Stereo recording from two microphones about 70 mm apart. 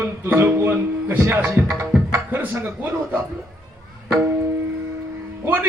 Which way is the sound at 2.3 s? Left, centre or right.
Right.